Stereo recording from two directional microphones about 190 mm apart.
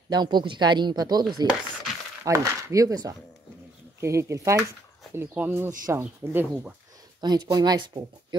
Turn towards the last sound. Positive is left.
turn(degrees=-20)  # may be behind; listen again after turning